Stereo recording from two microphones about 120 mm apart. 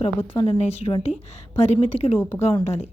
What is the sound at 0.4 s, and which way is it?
A woman's voice, 55° left (ahead or behind).